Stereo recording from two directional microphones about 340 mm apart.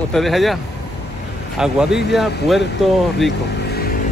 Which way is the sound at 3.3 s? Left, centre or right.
Left.